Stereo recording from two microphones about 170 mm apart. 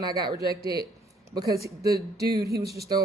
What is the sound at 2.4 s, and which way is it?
Speech, 65° right (ahead or behind).